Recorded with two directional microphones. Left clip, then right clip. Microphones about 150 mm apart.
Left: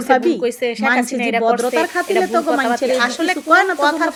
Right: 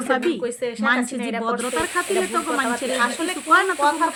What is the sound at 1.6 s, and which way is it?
A woman's voice, 10° left (ahead or behind).